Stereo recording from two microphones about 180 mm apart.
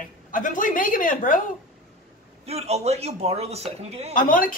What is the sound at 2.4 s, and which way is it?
Speech, 35° right (ahead or behind).